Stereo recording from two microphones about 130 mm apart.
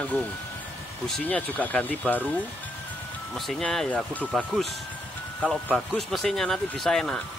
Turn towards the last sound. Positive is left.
turn(degrees=5)  # may be behind; listen again after turning